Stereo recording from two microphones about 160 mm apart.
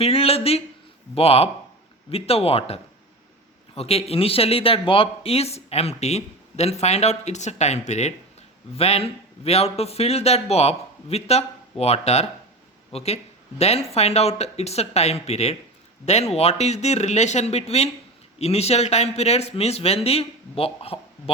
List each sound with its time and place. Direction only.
0.0 s speech: 40° left (ahead or behind)